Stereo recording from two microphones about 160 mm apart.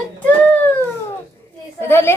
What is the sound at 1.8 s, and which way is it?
Speech, 15° left (ahead or behind).